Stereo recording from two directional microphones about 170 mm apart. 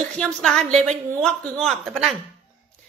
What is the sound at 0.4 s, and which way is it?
A woman's voice, centre (ahead or behind).